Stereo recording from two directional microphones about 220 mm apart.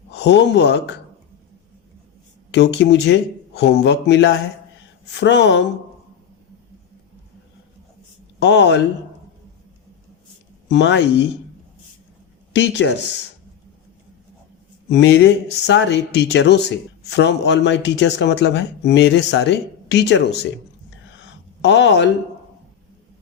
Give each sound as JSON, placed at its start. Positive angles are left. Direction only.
{"t": 0.1, "sound": "speech", "side_deg": 50}
{"t": 2.5, "sound": "speech", "side_deg": 50}
{"t": 8.4, "sound": "speech", "side_deg": 50}
{"t": 10.7, "sound": "speech", "side_deg": 50}
{"t": 12.5, "sound": "speech", "side_deg": 55}
{"t": 14.8, "sound": "speech", "side_deg": 50}
{"t": 21.6, "sound": "speech", "side_deg": 55}